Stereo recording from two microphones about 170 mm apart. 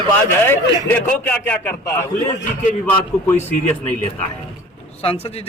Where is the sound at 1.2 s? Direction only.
10° left (ahead or behind).